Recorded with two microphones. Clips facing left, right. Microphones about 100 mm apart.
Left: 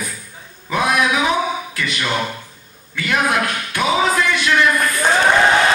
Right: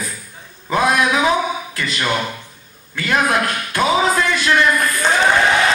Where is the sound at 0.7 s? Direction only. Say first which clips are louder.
Right 2 dB; 40° right (ahead or behind).